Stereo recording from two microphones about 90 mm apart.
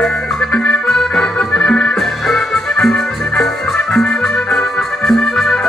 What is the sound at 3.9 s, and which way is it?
Organ, 10° left (ahead or behind).